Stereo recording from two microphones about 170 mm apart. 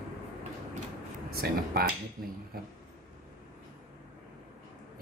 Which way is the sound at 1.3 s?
65° right (ahead or behind).